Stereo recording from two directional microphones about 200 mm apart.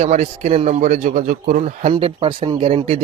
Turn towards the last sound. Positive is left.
turn(degrees=-30)  # may be behind; listen again after turning